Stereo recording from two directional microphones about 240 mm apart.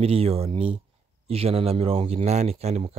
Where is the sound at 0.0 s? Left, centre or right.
Right.